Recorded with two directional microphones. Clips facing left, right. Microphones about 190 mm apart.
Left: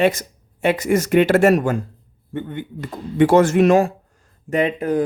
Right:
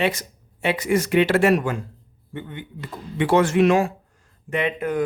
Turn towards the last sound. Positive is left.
turn(degrees=35)  # may be behind; listen again after turning